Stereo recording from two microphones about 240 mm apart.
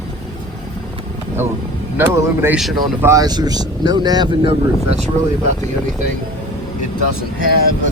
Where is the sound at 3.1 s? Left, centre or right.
Centre.